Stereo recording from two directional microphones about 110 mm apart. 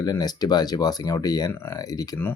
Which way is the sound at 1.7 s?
35° left (ahead or behind).